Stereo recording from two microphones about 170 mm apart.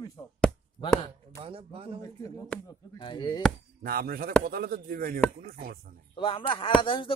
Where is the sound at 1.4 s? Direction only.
35° right (ahead or behind).